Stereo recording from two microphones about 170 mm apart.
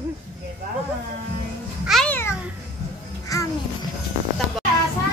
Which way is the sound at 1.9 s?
5° left (ahead or behind).